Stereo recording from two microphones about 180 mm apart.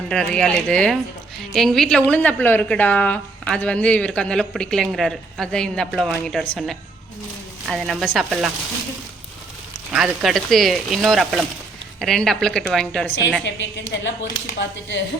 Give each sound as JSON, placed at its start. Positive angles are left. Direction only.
{"t": 0.1, "sound": "a woman's voice", "side_deg": 5}
{"t": 9.9, "sound": "a woman's voice", "side_deg": 0}
{"t": 13.4, "sound": "a woman's voice", "side_deg": 85}